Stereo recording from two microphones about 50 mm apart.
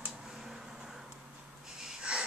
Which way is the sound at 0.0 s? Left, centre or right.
Centre.